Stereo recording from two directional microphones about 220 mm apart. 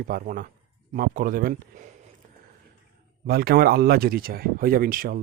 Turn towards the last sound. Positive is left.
turn(degrees=-40)  # may be behind; listen again after turning